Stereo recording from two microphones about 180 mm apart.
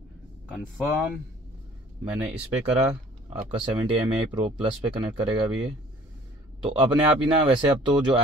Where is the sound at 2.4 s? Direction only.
35° right (ahead or behind).